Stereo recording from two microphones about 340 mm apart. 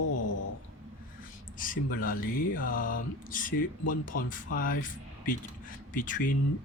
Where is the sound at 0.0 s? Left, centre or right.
Left.